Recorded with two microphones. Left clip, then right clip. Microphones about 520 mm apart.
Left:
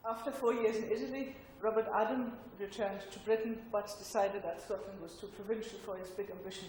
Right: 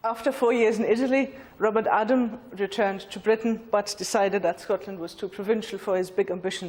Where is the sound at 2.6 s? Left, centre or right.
Right.